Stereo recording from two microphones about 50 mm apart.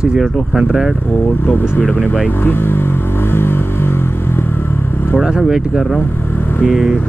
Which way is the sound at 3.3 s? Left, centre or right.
Left.